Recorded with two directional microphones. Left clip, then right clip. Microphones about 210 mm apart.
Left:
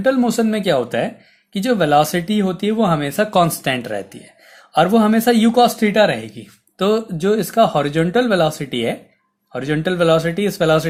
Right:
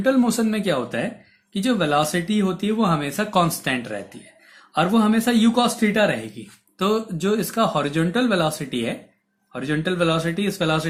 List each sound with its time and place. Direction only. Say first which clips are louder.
0.0 s speech: left 4 dB; 35° left (ahead or behind)